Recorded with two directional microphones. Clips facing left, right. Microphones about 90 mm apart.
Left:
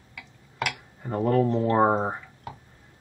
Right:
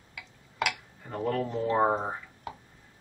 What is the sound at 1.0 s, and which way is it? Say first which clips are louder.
Speech: left 7 dB; 25° left (ahead or behind).